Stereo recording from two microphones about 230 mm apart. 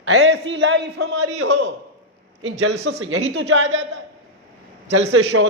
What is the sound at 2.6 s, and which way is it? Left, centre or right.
Speech, right.